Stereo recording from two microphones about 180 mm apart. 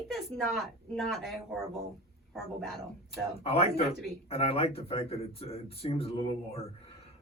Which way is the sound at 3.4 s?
30° left (ahead or behind).